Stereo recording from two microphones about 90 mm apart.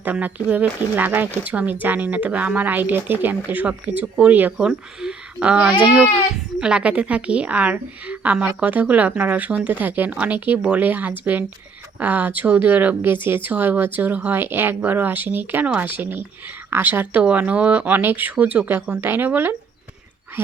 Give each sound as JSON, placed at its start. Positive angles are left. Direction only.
{"t": 0.0, "sound": "speech", "side_deg": -20}
{"t": 4.5, "sound": "speech", "side_deg": -5}